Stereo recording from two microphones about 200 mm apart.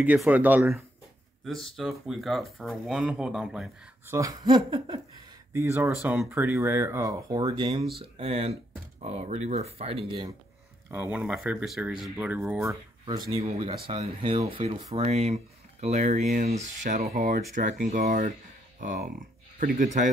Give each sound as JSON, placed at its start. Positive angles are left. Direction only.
{"t": 0.0, "sound": "speech", "side_deg": -10}
{"t": 4.1, "sound": "speech", "side_deg": -15}
{"t": 10.9, "sound": "speech", "side_deg": -5}
{"t": 12.6, "sound": "speech", "side_deg": -20}